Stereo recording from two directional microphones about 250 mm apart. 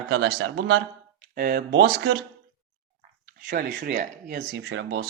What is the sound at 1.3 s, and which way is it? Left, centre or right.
Speech, right.